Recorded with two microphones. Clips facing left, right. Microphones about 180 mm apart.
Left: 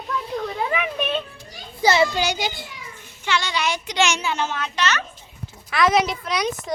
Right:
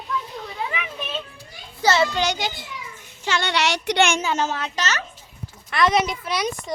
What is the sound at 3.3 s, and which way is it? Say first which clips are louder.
Speech: even; 50° right (ahead or behind).